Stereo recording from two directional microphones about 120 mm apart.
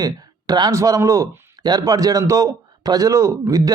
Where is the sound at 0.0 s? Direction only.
35° right (ahead or behind).